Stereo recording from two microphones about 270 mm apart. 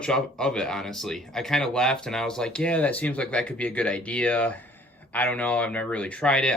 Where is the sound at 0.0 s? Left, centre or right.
Centre.